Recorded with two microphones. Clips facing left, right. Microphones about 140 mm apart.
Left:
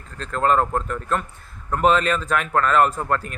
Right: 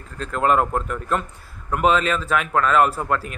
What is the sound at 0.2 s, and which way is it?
A man's voice, 5° right (ahead or behind).